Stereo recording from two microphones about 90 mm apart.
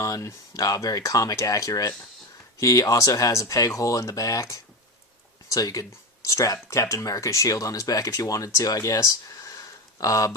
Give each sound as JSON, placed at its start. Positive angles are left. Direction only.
{"t": 0.0, "sound": "speech", "side_deg": 35}